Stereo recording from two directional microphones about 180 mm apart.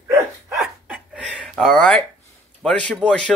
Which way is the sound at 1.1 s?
Centre (ahead or behind).